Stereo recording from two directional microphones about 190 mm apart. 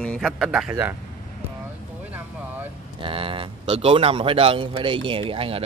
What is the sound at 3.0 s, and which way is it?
A man's voice, 30° right (ahead or behind).